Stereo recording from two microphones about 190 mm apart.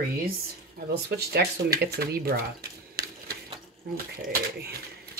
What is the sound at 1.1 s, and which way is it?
Speech, 60° right (ahead or behind).